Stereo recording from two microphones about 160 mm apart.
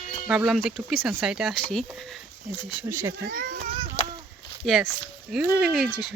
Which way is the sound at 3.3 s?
60° right (ahead or behind).